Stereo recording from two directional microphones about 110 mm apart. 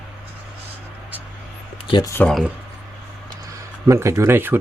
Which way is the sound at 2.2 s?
10° left (ahead or behind).